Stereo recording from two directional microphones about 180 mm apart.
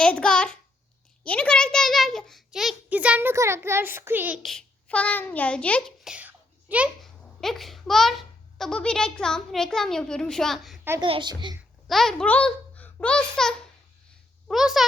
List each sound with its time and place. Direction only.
0.0 s a child's voice: 5° left (ahead or behind); by 4.4 s 10° right (ahead or behind)
4.4 s a child's voice: 5° left (ahead or behind)
6.1 s a child's voice: 10° right (ahead or behind)
11.0 s a child's voice: 25° right (ahead or behind)
11.9 s a child's voice: centre (ahead or behind)